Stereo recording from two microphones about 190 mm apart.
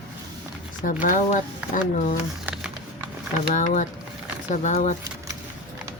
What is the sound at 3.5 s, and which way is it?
Speech, 40° left (ahead or behind).